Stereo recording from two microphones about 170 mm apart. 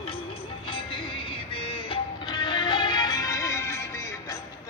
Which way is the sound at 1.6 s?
30° left (ahead or behind).